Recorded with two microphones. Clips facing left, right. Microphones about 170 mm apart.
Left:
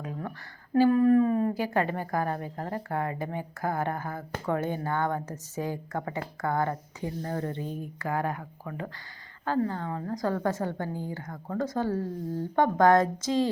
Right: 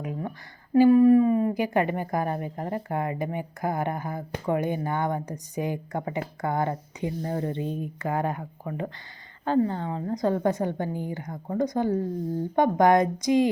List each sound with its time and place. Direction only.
0.0 s speech: 15° right (ahead or behind)